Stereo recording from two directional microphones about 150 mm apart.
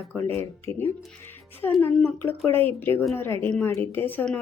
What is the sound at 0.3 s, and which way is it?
Speech, 15° left (ahead or behind).